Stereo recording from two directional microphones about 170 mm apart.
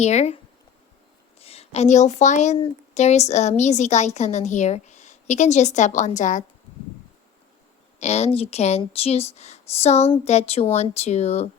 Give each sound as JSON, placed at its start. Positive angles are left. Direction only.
{"t": 0.0, "sound": "speech", "side_deg": 40}
{"t": 1.4, "sound": "a woman's voice", "side_deg": 35}
{"t": 7.9, "sound": "speech", "side_deg": 40}